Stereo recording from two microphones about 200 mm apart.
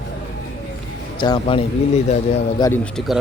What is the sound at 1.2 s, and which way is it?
Speech, 25° left (ahead or behind).